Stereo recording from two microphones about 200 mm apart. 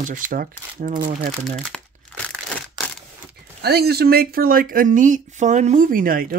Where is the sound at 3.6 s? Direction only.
55° right (ahead or behind).